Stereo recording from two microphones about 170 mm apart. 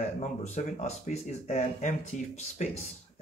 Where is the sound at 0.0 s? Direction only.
45° left (ahead or behind).